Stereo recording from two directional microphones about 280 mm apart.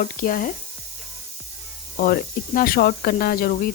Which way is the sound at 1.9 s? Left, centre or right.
Left.